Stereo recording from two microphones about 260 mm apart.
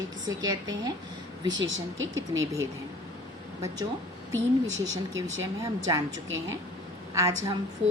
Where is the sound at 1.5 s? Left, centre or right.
Right.